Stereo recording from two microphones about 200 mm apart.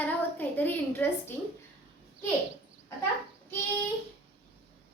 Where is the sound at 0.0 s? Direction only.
10° left (ahead or behind).